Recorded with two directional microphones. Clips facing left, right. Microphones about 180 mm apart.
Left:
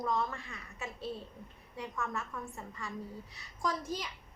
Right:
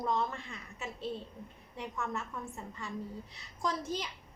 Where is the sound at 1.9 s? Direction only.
20° right (ahead or behind).